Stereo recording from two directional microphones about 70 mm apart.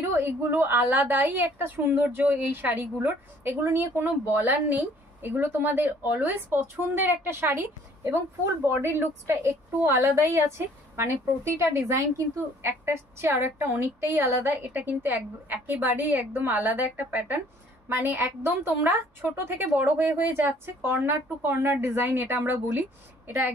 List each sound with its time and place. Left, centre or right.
0.1 s a woman's voice: right
0.5 s a woman's voice: right